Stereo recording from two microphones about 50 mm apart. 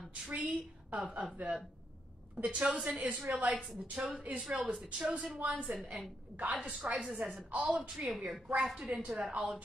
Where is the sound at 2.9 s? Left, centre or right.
Right.